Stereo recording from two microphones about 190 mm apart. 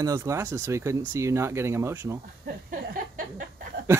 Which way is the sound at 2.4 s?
50° right (ahead or behind).